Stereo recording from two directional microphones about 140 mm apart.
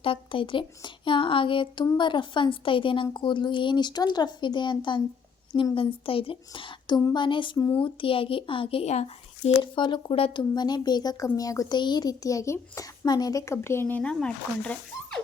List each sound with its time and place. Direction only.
0.0 s speech: 40° left (ahead or behind)
9.6 s speech: 35° left (ahead or behind); by 15.2 s 10° left (ahead or behind)